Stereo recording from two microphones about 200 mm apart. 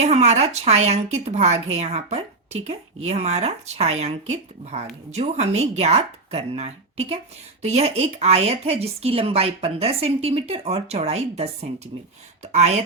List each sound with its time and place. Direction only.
0.0 s speech: 35° right (ahead or behind)